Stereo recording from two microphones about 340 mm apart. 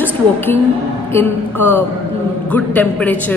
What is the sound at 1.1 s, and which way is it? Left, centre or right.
A woman's voice, centre.